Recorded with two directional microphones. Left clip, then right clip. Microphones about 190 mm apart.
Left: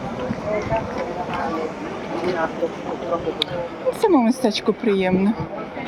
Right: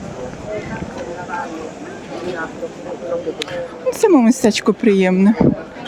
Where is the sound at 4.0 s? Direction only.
60° right (ahead or behind).